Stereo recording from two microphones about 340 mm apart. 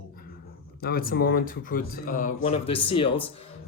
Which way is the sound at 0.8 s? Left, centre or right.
Left.